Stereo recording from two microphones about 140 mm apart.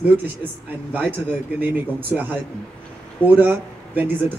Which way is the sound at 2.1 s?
15° right (ahead or behind).